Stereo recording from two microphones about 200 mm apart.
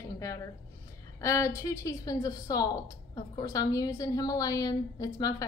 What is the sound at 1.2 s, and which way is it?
A woman's voice, 15° left (ahead or behind).